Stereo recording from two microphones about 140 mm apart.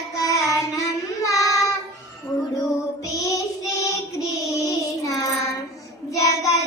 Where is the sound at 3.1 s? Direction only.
25° left (ahead or behind).